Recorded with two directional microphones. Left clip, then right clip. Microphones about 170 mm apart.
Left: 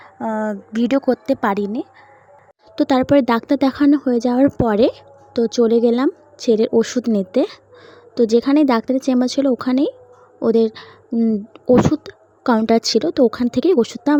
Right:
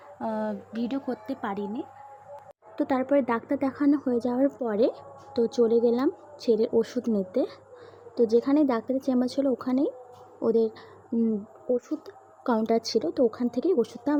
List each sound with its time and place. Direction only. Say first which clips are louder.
0.2 s speech: left 8 dB; 40° left (ahead or behind)
2.7 s speech: left 10 dB; 60° left (ahead or behind)
11.1 s a woman's voice: left 8 dB; 35° left (ahead or behind)
11.8 s speech: left 17 dB; 55° left (ahead or behind)